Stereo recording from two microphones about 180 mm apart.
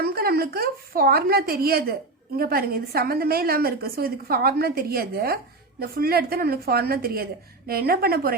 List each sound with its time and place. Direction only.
0.0 s a woman's voice: 55° right (ahead or behind)